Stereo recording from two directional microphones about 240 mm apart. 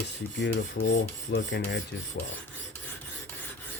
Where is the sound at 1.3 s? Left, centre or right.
Left.